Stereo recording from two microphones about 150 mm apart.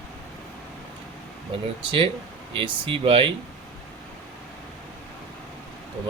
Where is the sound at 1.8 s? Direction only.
35° right (ahead or behind).